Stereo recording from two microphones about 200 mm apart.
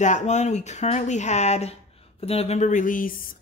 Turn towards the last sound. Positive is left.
turn(degrees=45)  # may be behind; listen again after turning